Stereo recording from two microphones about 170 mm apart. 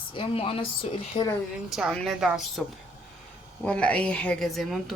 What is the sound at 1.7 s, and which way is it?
Speech, centre (ahead or behind).